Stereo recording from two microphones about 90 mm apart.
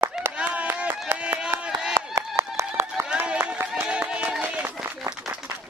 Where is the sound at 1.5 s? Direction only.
15° right (ahead or behind).